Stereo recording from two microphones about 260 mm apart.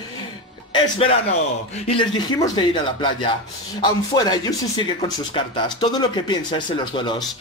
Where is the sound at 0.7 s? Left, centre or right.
Centre.